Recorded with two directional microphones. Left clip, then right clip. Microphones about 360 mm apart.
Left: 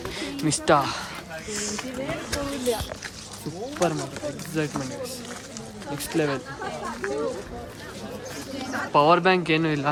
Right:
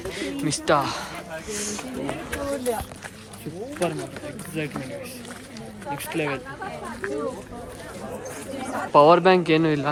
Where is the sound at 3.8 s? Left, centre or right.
Centre.